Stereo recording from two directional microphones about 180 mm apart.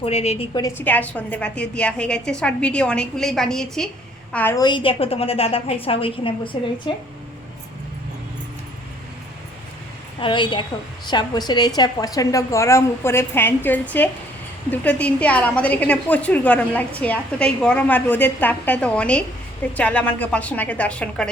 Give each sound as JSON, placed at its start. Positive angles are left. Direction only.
{"t": 0.0, "sound": "a woman's voice", "side_deg": 35}
{"t": 0.8, "sound": "a woman's voice", "side_deg": 10}
{"t": 4.5, "sound": "a woman's voice", "side_deg": 25}
{"t": 10.2, "sound": "a woman's voice", "side_deg": 25}